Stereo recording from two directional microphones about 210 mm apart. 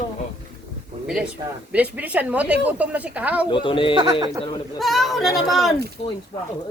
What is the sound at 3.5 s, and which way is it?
Speech, 25° left (ahead or behind).